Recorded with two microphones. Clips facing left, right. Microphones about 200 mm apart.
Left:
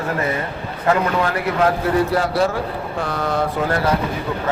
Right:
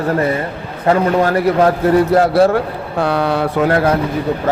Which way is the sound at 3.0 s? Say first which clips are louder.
Right 6 dB; 70° right (ahead or behind).